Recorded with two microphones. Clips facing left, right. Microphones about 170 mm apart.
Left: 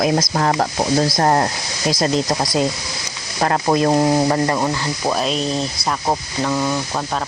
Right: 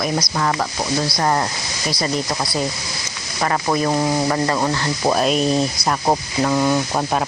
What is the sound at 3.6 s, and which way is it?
Speech, 25° left (ahead or behind).